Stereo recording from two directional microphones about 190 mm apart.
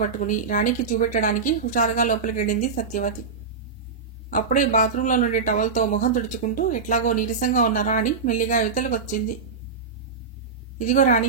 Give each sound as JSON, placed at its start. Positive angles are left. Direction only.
{"t": 0.0, "sound": "speech", "side_deg": 45}
{"t": 4.3, "sound": "speech", "side_deg": 45}
{"t": 10.8, "sound": "a woman's voice", "side_deg": 40}